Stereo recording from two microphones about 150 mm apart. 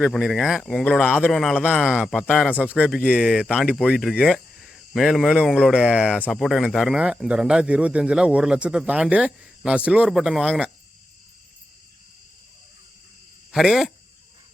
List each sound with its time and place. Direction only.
0.0 s speech: centre (ahead or behind)
3.0 s speech: 10° right (ahead or behind)
13.5 s speech: centre (ahead or behind)